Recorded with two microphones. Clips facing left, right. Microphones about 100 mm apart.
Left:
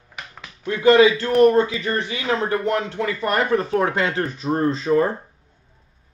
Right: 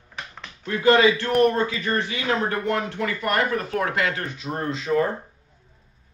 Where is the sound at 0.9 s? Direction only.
20° left (ahead or behind).